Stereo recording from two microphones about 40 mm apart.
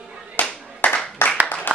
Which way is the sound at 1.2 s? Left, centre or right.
Left.